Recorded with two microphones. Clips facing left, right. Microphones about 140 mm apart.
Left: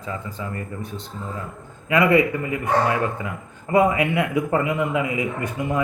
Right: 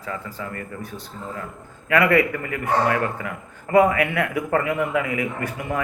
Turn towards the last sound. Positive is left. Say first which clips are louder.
# left 2 dB
turn(degrees=20)  # may be behind; listen again after turning